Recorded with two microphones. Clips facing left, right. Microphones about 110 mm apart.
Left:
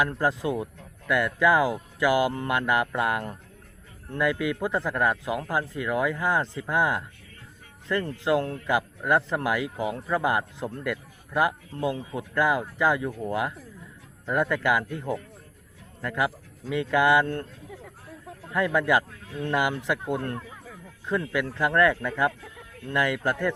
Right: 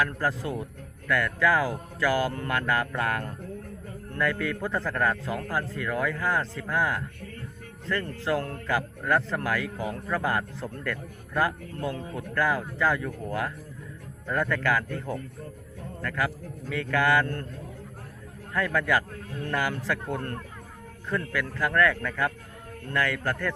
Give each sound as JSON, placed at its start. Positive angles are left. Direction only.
{"t": 0.0, "sound": "speech", "side_deg": 20}
{"t": 18.5, "sound": "speech", "side_deg": 15}